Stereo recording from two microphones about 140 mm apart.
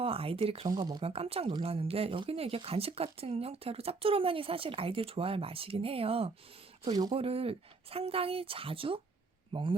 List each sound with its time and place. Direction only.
0.0 s speech: 40° right (ahead or behind)
0.7 s speech: 30° right (ahead or behind)
1.0 s a man's voice: 45° right (ahead or behind)